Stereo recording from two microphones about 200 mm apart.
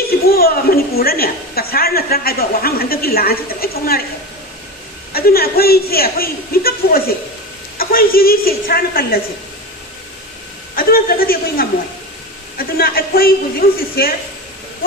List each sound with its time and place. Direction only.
0.3 s a woman's voice: 50° left (ahead or behind)
5.1 s a woman's voice: 50° left (ahead or behind)
10.8 s a woman's voice: 45° left (ahead or behind)